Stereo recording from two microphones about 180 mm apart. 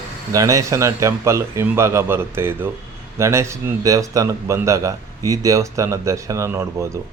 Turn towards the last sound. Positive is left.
turn(degrees=-15)  # may be behind; listen again after turning